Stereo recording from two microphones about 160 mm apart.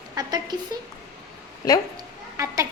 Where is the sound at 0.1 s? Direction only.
25° right (ahead or behind).